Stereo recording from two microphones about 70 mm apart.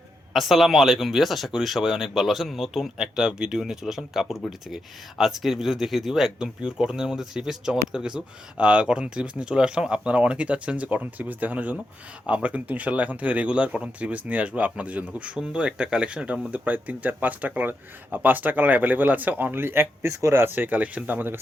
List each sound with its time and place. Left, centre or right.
0.3 s speech: centre; by 20.4 s right
20.4 s speech: right